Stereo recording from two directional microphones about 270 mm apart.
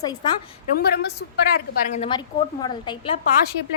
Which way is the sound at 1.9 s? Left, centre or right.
Centre.